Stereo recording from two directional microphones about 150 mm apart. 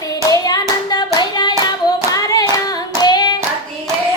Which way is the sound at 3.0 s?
30° left (ahead or behind).